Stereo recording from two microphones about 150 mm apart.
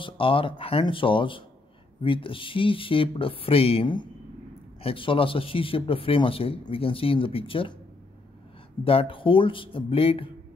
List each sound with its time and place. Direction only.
0.0 s speech: 35° left (ahead or behind)
8.8 s speech: 35° left (ahead or behind)